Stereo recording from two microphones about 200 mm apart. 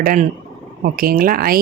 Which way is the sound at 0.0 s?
45° right (ahead or behind).